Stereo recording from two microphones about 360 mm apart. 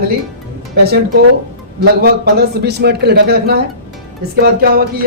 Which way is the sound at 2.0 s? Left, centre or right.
Right.